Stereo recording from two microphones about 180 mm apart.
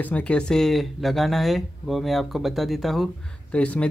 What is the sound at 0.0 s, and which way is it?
Speech, 10° left (ahead or behind).